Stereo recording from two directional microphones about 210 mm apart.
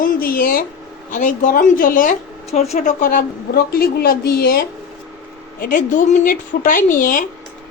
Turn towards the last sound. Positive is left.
turn(degrees=40)  # may be behind; listen again after turning